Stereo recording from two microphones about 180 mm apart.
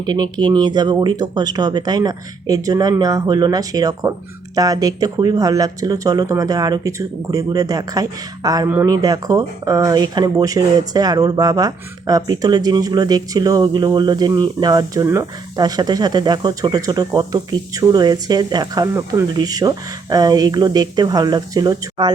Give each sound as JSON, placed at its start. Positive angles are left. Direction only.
{"t": 0.0, "sound": "speech", "side_deg": -20}